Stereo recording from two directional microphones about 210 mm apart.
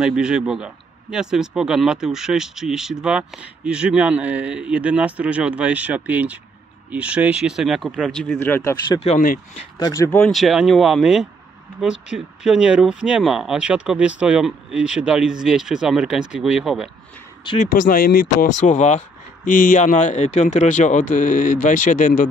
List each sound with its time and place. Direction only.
0.0 s speech: 5° right (ahead or behind)
8.8 s speech: 25° left (ahead or behind)
9.8 s speech: 20° left (ahead or behind)
10.1 s speech: centre (ahead or behind)
17.6 s speech: 40° left (ahead or behind)